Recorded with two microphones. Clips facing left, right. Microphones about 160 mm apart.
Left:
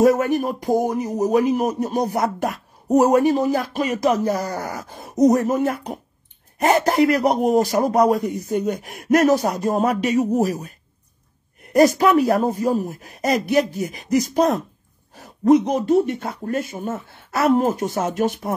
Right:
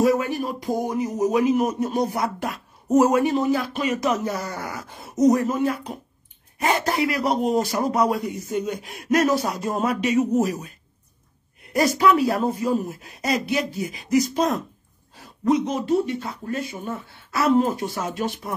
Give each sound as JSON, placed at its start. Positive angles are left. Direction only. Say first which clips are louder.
{"t": 0.0, "sound": "speech", "louder": "left 4 dB", "side_deg": 50}
{"t": 12.0, "sound": "speech", "louder": "left 3 dB", "side_deg": 45}